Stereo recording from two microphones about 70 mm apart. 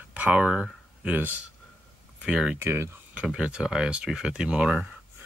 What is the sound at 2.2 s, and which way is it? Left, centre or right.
Speech, centre.